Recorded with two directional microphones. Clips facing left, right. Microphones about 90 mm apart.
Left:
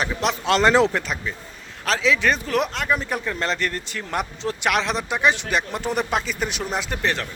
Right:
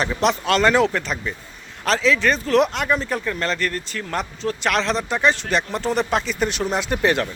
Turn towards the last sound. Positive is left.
turn(degrees=-5)  # may be behind; listen again after turning